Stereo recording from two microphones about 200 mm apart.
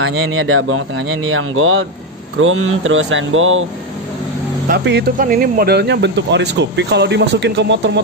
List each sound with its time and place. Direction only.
0.0 s speech: 90° right
4.6 s speech: 55° right (ahead or behind)